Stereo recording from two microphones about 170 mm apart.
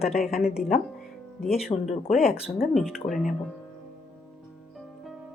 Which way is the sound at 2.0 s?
5° right (ahead or behind).